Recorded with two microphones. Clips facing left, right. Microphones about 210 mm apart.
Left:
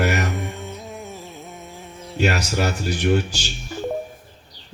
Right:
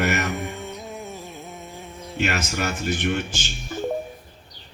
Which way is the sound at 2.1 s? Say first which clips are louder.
Left 4 dB; 35° left (ahead or behind).